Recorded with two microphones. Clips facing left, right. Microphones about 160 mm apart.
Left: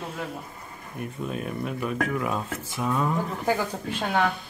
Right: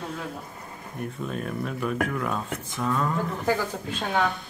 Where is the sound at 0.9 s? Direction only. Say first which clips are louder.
Even; 5° left (ahead or behind).